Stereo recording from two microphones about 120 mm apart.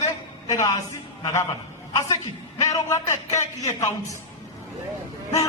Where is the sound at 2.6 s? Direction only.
25° left (ahead or behind).